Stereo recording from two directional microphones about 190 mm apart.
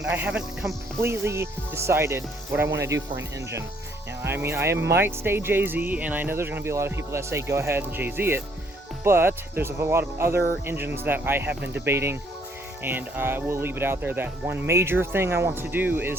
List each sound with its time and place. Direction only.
0.0 s speech: 5° right (ahead or behind)